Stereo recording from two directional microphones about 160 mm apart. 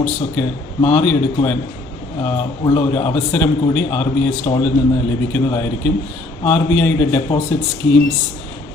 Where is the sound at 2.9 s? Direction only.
10° left (ahead or behind).